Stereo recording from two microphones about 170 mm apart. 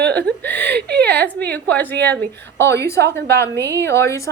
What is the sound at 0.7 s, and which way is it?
Speech, 75° right (ahead or behind).